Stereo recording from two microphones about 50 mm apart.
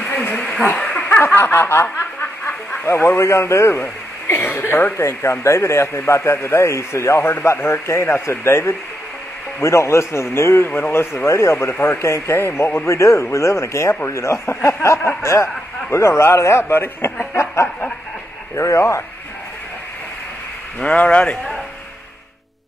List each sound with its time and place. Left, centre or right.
0.0 s a sound: left
0.4 s a sound: centre
0.7 s dog: left
1.2 s snicker: left
2.9 s a man's voice: left
4.9 s a man's voice: left
11.2 s a man's voice: left
17.4 s speech: left
20.8 s speech: left